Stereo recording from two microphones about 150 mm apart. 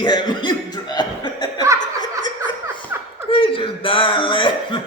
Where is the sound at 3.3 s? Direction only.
35° left (ahead or behind).